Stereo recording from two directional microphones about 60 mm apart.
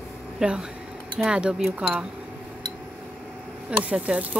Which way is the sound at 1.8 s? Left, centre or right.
Centre.